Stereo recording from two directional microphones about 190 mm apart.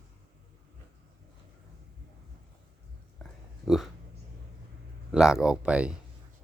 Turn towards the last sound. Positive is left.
turn(degrees=-5)  # may be behind; listen again after turning